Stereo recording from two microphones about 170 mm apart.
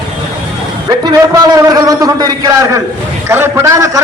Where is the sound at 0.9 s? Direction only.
20° right (ahead or behind).